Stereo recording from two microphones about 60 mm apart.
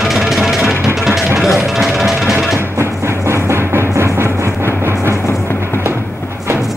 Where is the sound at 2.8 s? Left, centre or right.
Right.